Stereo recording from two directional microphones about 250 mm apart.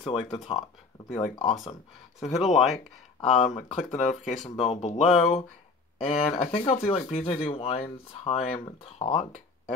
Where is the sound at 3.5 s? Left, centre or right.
Left.